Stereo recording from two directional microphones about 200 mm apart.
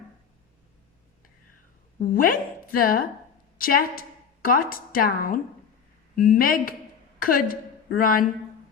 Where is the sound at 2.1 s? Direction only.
45° left (ahead or behind).